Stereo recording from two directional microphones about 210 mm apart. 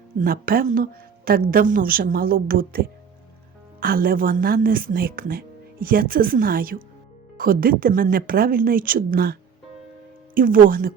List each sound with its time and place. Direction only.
0.2 s a woman's voice: 45° right (ahead or behind)